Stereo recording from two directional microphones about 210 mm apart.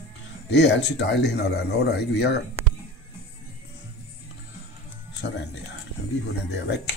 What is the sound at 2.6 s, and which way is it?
Music, 10° right (ahead or behind).